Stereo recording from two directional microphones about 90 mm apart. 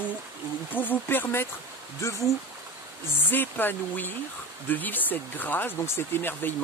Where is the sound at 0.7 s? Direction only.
20° left (ahead or behind).